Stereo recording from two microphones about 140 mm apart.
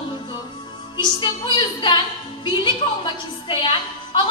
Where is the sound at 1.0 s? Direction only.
30° left (ahead or behind).